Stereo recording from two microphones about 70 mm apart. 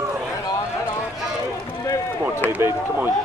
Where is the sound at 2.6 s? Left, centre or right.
Right.